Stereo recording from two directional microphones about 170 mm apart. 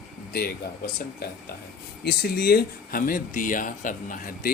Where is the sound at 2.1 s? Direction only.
65° left (ahead or behind).